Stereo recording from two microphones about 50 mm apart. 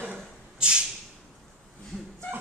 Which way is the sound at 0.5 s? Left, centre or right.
Centre.